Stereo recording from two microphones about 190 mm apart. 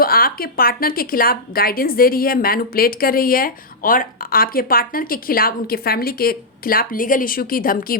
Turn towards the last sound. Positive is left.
turn(degrees=50)  # may be behind; listen again after turning